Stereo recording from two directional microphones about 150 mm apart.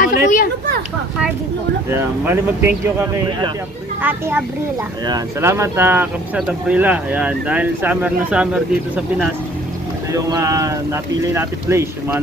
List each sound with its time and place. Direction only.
0.0 s a sound: 65° left (ahead or behind)
1.9 s speech: 15° right (ahead or behind)
4.0 s speech: 10° right (ahead or behind)
10.1 s speech: 20° right (ahead or behind)